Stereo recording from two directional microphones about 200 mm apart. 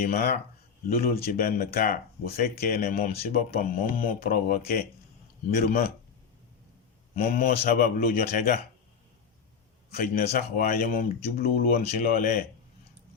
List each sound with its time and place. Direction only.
0.0 s speech: 50° left (ahead or behind)
7.2 s speech: 45° left (ahead or behind)
9.9 s speech: 50° left (ahead or behind)